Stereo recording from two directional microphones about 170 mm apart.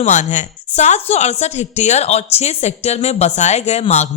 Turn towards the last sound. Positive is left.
turn(degrees=40)  # may be behind; listen again after turning